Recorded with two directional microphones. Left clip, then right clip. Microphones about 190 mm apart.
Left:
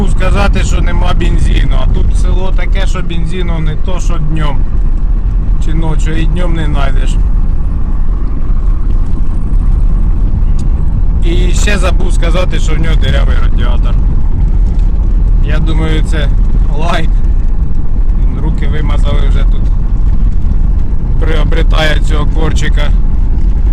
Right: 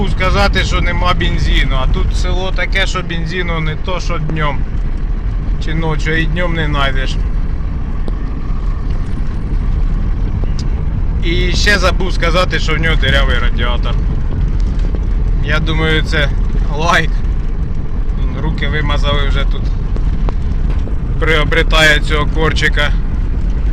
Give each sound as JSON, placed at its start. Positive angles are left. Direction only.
{"t": 0.2, "sound": "speech", "side_deg": 5}
{"t": 1.8, "sound": "speech", "side_deg": -5}
{"t": 3.1, "sound": "speech", "side_deg": 5}
{"t": 5.8, "sound": "speech", "side_deg": 5}
{"t": 11.3, "sound": "speech", "side_deg": 10}
{"t": 15.4, "sound": "speech", "side_deg": 5}
{"t": 18.6, "sound": "speech", "side_deg": 0}
{"t": 21.2, "sound": "speech", "side_deg": 10}